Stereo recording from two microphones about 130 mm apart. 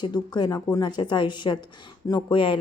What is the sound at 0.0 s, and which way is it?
Speech, 35° left (ahead or behind).